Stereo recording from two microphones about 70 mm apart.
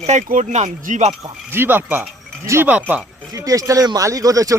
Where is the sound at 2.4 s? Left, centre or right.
Right.